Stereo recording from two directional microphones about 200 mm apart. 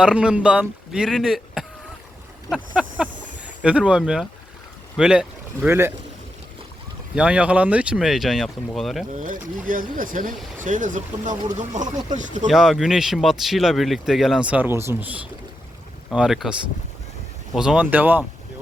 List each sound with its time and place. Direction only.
0.0 s speech: 5° right (ahead or behind)
2.7 s a sound: 5° right (ahead or behind)
4.9 s speech: 5° right (ahead or behind)
7.2 s speech: 5° right (ahead or behind)
9.1 s speech: 40° right (ahead or behind)
12.5 s speech: centre (ahead or behind)